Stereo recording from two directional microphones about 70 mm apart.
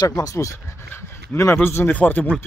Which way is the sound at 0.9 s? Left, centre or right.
Left.